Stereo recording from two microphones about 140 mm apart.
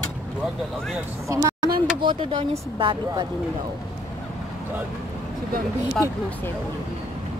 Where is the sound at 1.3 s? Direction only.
25° right (ahead or behind).